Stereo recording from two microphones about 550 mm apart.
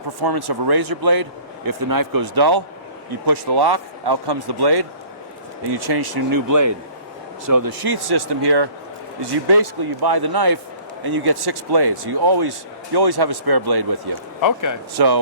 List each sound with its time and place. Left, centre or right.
0.2 s a man's voice: right
14.4 s speech: left
14.9 s a man's voice: right